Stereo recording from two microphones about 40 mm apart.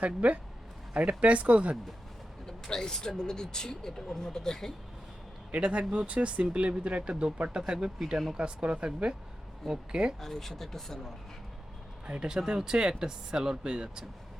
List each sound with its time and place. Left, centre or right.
0.0 s speech: right
2.7 s speech: centre
5.5 s speech: right; by 8.2 s centre
8.4 s speech: right
10.2 s speech: centre
12.0 s speech: right
12.4 s speech: centre